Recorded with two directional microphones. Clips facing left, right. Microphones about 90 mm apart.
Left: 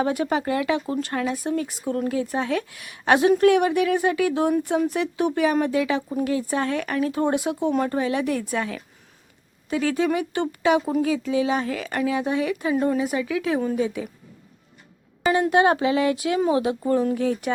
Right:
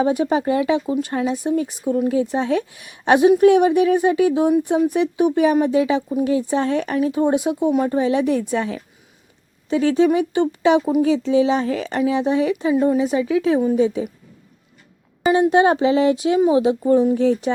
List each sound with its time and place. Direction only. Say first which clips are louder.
0.0 s a woman's voice: right 5 dB; 20° right (ahead or behind)
12.7 s speech: right 4 dB; 10° right (ahead or behind)
13.0 s a woman's voice: right 6 dB; 25° right (ahead or behind)
15.3 s a woman's voice: right 4 dB; 25° right (ahead or behind)